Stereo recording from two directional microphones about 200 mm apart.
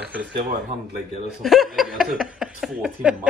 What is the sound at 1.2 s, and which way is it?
Speech, centre (ahead or behind).